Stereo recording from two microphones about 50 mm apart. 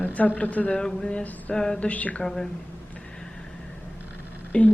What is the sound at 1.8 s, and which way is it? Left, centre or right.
Mantra, left.